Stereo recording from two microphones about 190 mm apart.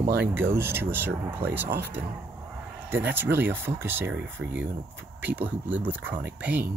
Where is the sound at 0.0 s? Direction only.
55° right (ahead or behind).